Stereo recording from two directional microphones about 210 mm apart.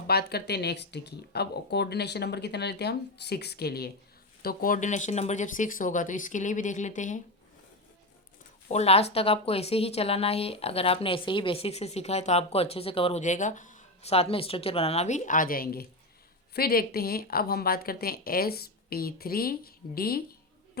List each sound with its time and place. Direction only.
0.1 s speech: 50° left (ahead or behind)
8.6 s a woman's voice: 30° left (ahead or behind)